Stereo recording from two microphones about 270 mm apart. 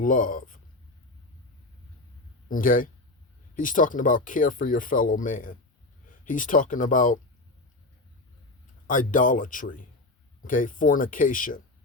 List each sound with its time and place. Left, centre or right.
0.0 s speech: left
2.5 s speech: left
8.9 s speech: left